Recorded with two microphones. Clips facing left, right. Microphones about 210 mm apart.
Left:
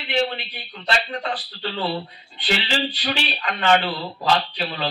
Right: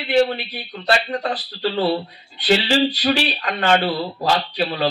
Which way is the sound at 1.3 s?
40° right (ahead or behind).